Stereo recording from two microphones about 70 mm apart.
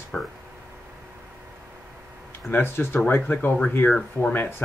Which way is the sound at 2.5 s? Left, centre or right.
Left.